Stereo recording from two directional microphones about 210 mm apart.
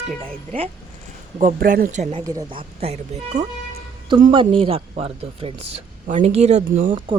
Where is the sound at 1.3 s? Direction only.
40° right (ahead or behind).